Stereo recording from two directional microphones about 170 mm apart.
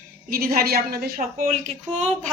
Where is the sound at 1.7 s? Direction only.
40° right (ahead or behind).